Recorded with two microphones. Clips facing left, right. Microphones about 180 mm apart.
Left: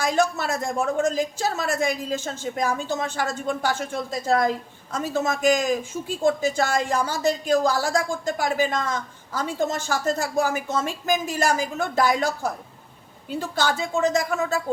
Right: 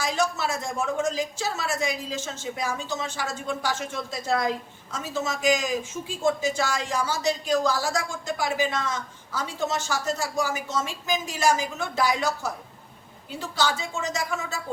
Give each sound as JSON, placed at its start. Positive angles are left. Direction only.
{"t": 0.0, "sound": "a woman's voice", "side_deg": 55}